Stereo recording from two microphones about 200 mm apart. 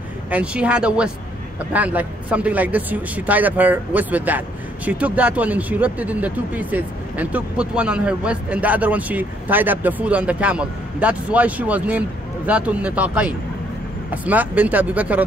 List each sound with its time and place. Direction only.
0.3 s speech: 5° right (ahead or behind)